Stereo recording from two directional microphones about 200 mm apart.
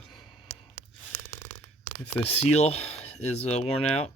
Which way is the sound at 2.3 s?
30° left (ahead or behind).